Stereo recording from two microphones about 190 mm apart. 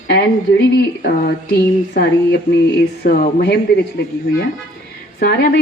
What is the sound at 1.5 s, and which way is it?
A woman's voice, 55° left (ahead or behind).